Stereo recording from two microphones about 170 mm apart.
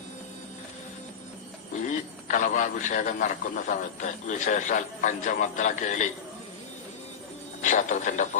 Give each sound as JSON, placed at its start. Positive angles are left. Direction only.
{"t": 1.9, "sound": "a man's voice", "side_deg": 50}
{"t": 7.6, "sound": "speech", "side_deg": 45}